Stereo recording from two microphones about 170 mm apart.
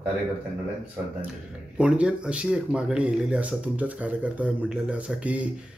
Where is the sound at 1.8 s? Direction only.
5° right (ahead or behind).